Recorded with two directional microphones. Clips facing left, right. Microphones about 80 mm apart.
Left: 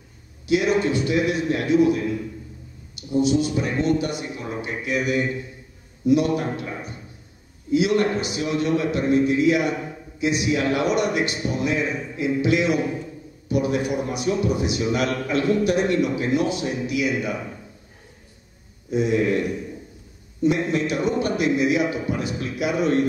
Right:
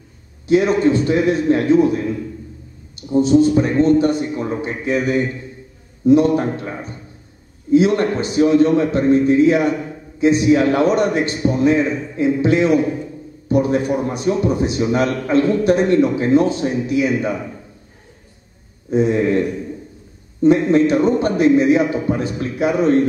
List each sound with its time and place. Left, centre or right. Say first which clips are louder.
0.5 s a man's voice: right 6 dB; right
3.0 s a man's voice: right 7 dB; right
18.9 s a man's voice: right 5 dB; right
20.4 s a man's voice: right 8 dB; right